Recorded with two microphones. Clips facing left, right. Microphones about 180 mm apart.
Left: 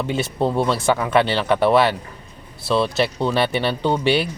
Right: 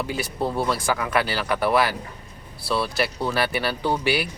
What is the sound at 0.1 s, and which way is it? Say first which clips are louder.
Speech: left 5 dB; 25° left (ahead or behind).